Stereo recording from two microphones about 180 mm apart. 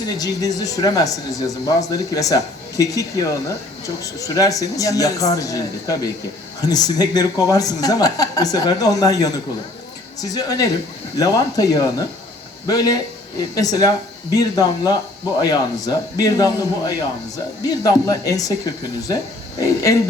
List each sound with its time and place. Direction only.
0.0 s speech: 20° left (ahead or behind)